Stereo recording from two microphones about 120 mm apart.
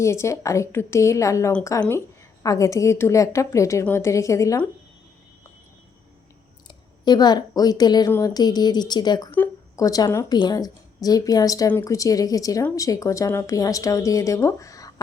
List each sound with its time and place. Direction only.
0.0 s speech: 25° left (ahead or behind)
6.7 s a woman's voice: 35° left (ahead or behind)
10.3 s a woman's voice: 35° left (ahead or behind)